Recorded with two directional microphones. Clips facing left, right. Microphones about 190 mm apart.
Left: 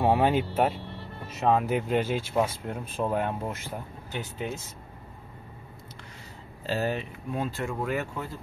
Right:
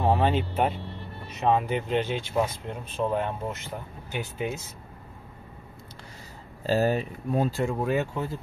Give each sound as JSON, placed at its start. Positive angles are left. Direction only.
{"t": 0.0, "sound": "speech", "side_deg": 10}
{"t": 4.1, "sound": "speech", "side_deg": -10}
{"t": 6.6, "sound": "speech", "side_deg": -40}
{"t": 7.6, "sound": "speech", "side_deg": -25}